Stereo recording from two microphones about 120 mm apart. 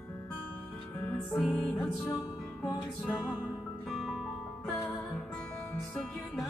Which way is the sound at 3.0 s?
5° right (ahead or behind).